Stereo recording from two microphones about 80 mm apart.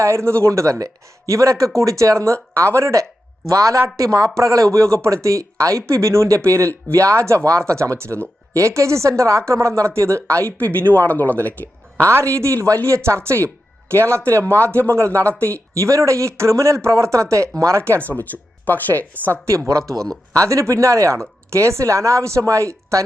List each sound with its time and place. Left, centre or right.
0.0 s a woman's voice: right
11.1 s speech: left
11.4 s a sound: left
12.0 s speech: right
18.3 s speech: left
19.5 s speech: right
19.8 s speech: centre
20.3 s speech: right